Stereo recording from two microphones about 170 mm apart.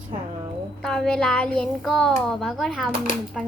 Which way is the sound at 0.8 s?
5° left (ahead or behind).